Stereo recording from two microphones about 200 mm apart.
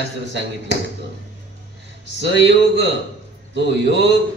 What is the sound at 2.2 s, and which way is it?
Mantra, 60° right (ahead or behind).